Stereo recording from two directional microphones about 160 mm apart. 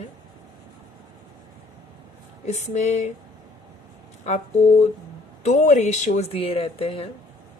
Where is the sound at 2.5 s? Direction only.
45° left (ahead or behind).